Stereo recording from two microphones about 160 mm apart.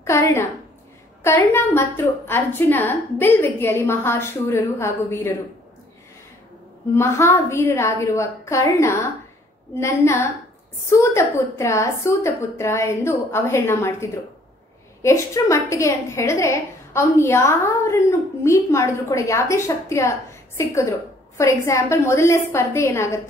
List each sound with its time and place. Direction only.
0.0 s a woman's voice: 15° left (ahead or behind)
7.0 s a woman's voice: 15° left (ahead or behind)